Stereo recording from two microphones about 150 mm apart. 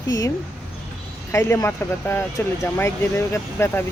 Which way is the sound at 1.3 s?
15° left (ahead or behind).